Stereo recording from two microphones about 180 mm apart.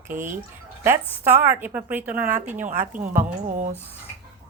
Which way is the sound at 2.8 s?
45° right (ahead or behind).